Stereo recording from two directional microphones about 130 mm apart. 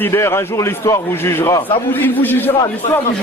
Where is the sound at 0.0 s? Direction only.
20° left (ahead or behind).